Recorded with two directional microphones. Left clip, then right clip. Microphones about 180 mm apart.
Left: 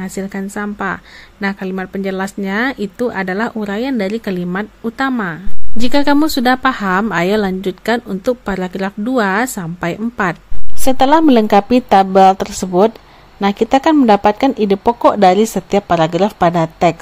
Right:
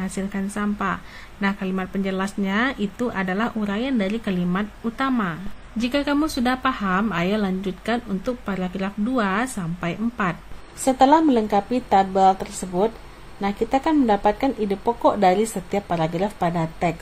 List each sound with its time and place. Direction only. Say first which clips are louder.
0.0 s a woman's voice: left 5 dB; 30° left (ahead or behind)